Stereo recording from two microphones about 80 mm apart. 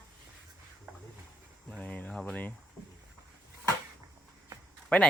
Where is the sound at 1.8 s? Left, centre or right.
Centre.